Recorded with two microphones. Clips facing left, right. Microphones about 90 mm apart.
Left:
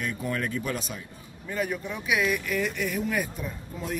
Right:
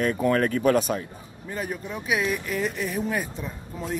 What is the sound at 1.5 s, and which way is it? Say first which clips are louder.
Speech: left 1 dB; 35° right (ahead or behind).